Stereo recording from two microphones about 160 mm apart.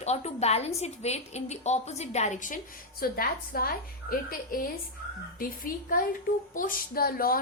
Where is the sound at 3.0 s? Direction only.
65° left (ahead or behind).